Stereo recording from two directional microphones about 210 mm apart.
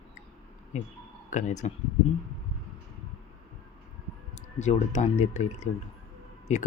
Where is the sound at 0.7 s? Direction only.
35° left (ahead or behind).